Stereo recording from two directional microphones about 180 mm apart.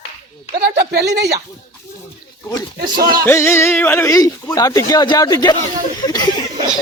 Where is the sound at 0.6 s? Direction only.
65° right (ahead or behind).